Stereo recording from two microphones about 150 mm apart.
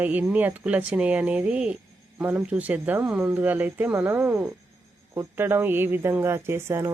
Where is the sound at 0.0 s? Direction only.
10° right (ahead or behind).